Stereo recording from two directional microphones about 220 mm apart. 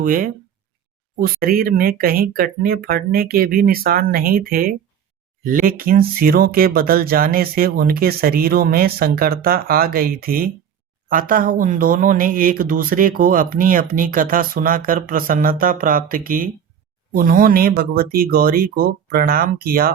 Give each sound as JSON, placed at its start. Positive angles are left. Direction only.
{"t": 0.0, "sound": "speech", "side_deg": -40}